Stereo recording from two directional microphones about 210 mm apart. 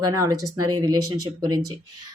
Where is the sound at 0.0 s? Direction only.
15° right (ahead or behind).